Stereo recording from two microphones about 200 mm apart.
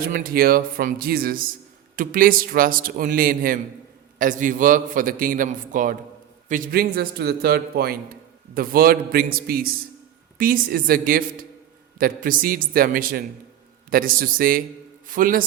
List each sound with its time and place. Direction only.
0.0 s a man's voice: 45° right (ahead or behind)